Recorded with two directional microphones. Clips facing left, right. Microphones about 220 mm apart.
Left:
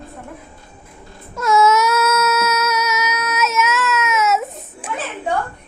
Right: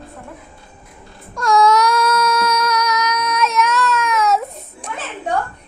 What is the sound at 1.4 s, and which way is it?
Child singing, 5° left (ahead or behind).